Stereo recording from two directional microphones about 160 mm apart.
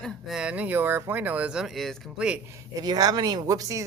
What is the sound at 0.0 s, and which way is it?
Speech, 5° right (ahead or behind).